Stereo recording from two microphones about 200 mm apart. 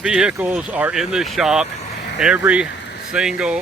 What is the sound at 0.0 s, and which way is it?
Speech, 5° right (ahead or behind).